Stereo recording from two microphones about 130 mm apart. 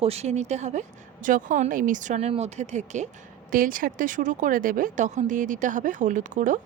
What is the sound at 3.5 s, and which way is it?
Speech, 90° right.